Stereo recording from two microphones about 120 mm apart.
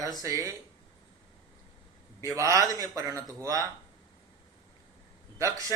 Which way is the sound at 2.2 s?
25° right (ahead or behind).